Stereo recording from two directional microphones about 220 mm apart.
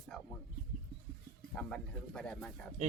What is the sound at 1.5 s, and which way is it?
Speech, 5° left (ahead or behind).